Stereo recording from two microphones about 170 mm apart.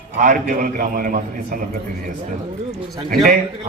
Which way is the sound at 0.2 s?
55° right (ahead or behind).